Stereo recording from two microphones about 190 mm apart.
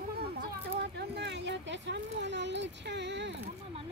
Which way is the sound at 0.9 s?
65° right (ahead or behind).